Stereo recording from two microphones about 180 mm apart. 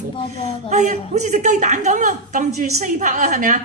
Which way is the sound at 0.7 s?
40° right (ahead or behind).